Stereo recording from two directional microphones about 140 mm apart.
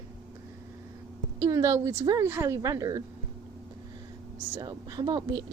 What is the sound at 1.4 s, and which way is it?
Speech, 25° right (ahead or behind).